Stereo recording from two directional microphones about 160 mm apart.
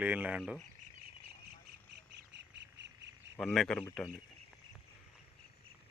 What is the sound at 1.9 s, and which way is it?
Squawk, 90° right.